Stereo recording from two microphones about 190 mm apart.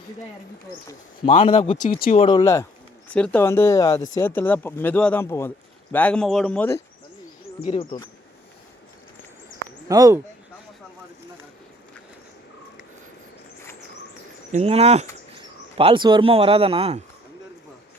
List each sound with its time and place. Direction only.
1.3 s speech: 30° left (ahead or behind)
1.8 s speech: 50° left (ahead or behind)
2.1 s speech: 25° left (ahead or behind)
3.1 s speech: 5° left (ahead or behind)
7.6 s speech: 30° left (ahead or behind)
9.9 s speech: 15° right (ahead or behind)
14.5 s speech: 30° right (ahead or behind)